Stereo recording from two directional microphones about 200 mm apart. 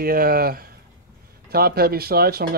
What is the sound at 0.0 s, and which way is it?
Speech, 50° right (ahead or behind).